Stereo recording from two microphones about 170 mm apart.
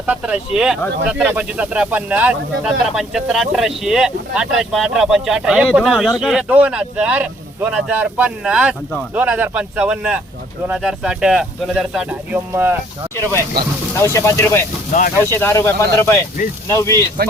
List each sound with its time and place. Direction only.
0.0 s speech: 5° right (ahead or behind)
13.9 s speech: 15° left (ahead or behind)
14.9 s speech: 50° left (ahead or behind)
15.3 s speech: 15° left (ahead or behind)